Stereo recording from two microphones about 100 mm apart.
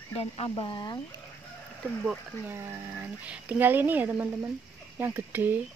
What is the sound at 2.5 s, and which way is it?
Speech, 30° right (ahead or behind).